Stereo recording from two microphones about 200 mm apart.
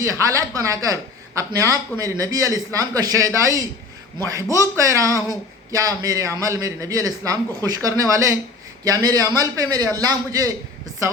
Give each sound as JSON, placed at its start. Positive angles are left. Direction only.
{"t": 0.0, "sound": "a man's voice", "side_deg": -15}